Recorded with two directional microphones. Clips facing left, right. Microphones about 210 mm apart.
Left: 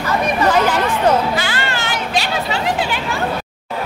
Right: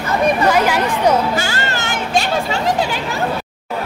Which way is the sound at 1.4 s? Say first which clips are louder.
Right 1 dB; 45° right (ahead or behind).